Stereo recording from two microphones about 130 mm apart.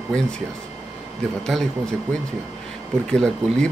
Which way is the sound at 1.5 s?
Centre (ahead or behind).